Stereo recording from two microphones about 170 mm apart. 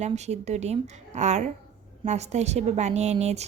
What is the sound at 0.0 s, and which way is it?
Speech, 40° right (ahead or behind).